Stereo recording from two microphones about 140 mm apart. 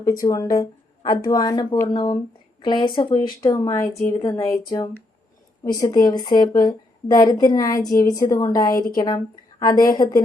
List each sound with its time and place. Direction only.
0.0 s a woman's voice: 25° left (ahead or behind)
3.6 s speech: 20° left (ahead or behind)